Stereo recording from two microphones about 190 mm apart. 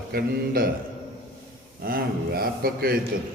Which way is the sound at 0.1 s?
50° right (ahead or behind).